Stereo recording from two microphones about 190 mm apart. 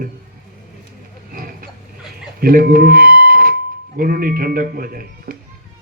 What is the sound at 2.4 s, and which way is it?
Speech, 50° right (ahead or behind).